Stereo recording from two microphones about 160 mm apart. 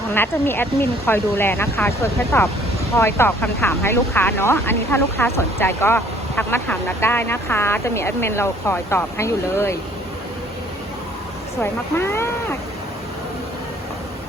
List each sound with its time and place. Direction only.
0.1 s speech: 15° left (ahead or behind)
11.6 s speech: 15° left (ahead or behind)